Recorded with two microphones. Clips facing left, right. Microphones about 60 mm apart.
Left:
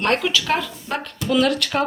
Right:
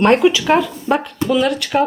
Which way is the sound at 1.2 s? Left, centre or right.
Centre.